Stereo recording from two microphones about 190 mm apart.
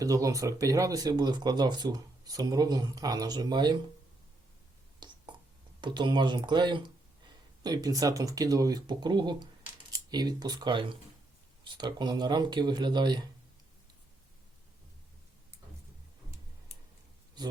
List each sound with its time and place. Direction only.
0.0 s speech: 15° right (ahead or behind)
4.9 s a sound: 25° right (ahead or behind)
5.8 s speech: 25° right (ahead or behind)
17.4 s speech: 20° right (ahead or behind)